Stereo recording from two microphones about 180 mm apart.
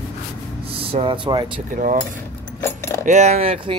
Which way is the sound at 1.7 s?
50° right (ahead or behind).